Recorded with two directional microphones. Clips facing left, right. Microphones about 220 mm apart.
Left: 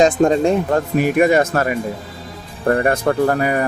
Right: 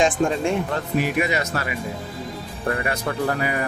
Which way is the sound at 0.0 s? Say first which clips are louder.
Left 7 dB; 40° left (ahead or behind).